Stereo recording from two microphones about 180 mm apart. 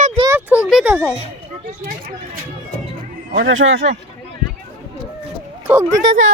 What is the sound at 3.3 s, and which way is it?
Speech, 85° right.